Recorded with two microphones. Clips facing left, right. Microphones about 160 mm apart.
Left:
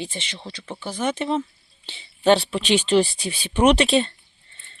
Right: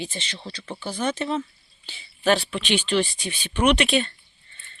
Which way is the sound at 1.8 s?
25° left (ahead or behind).